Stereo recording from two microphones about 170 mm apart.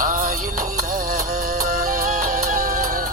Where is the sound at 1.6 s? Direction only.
55° right (ahead or behind).